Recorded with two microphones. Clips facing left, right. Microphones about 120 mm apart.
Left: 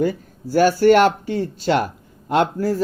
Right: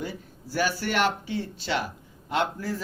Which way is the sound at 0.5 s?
45° left (ahead or behind).